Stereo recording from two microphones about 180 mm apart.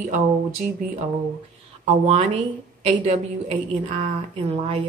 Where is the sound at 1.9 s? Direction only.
35° right (ahead or behind).